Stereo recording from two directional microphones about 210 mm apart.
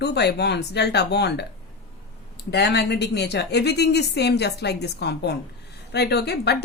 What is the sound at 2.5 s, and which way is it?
A woman's voice, 55° left (ahead or behind).